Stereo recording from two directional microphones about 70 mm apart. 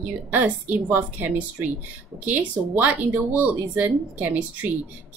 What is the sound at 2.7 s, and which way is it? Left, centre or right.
A woman's voice, right.